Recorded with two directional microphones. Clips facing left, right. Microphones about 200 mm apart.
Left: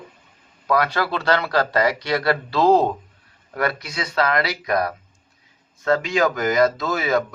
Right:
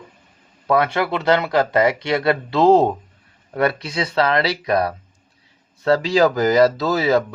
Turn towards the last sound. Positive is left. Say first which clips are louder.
# right 4 dB
turn(degrees=-30)  # may be behind; listen again after turning